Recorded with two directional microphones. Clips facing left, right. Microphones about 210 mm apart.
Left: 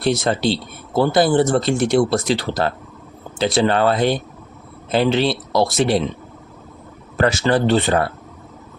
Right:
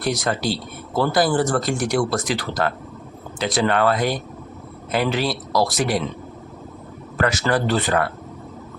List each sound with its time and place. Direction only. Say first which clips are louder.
0.0 s speech: left 4 dB; 25° left (ahead or behind)
7.2 s speech: left 4 dB; 25° left (ahead or behind)